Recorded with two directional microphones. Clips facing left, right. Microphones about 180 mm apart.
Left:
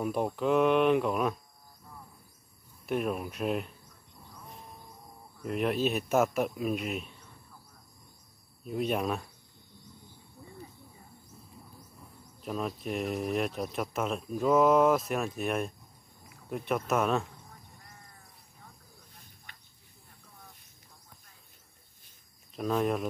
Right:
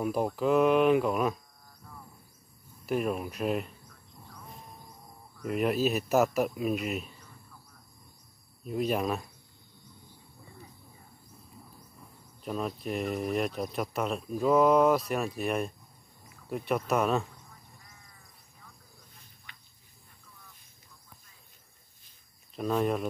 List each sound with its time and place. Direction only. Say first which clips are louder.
0.0 s speech: right 1 dB; centre (ahead or behind)
2.9 s speech: right 1 dB; centre (ahead or behind)
5.4 s speech: right 2 dB; centre (ahead or behind)
8.6 s speech: right 1 dB; centre (ahead or behind)
12.4 s speech: right 1 dB; centre (ahead or behind)
19.5 s cricket: right 1 dB; 45° left (ahead or behind)
22.6 s speech: right 1 dB; centre (ahead or behind)